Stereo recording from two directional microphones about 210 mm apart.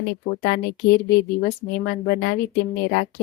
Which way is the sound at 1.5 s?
50° left (ahead or behind).